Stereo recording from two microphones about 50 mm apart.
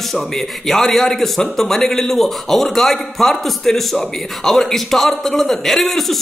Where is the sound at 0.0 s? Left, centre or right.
Centre.